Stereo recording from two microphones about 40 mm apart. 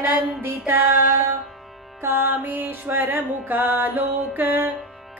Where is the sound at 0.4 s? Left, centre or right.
Right.